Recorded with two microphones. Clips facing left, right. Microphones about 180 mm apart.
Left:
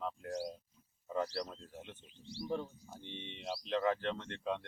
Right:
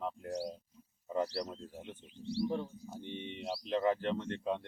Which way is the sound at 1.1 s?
30° right (ahead or behind).